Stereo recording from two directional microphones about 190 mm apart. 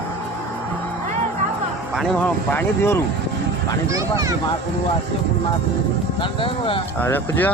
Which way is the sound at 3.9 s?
15° right (ahead or behind).